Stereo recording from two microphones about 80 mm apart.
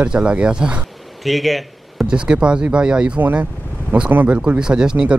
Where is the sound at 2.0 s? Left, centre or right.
Centre.